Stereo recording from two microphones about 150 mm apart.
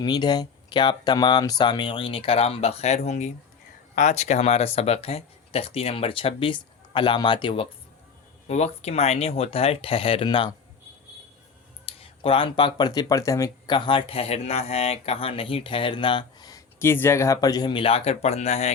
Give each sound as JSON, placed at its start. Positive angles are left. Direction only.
{"t": 0.0, "sound": "speech", "side_deg": 30}
{"t": 8.4, "sound": "speech", "side_deg": 45}
{"t": 11.9, "sound": "speech", "side_deg": 40}